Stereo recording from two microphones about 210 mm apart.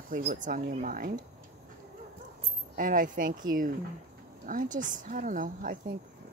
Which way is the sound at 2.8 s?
40° right (ahead or behind).